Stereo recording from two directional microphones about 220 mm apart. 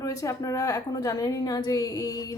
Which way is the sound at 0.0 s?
15° left (ahead or behind).